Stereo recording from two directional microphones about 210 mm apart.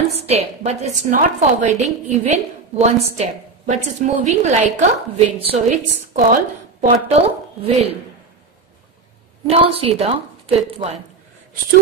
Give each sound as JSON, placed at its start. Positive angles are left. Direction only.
{"t": 0.3, "sound": "a woman's voice", "side_deg": -30}
{"t": 6.1, "sound": "a woman's voice", "side_deg": -40}
{"t": 9.5, "sound": "a woman's voice", "side_deg": -30}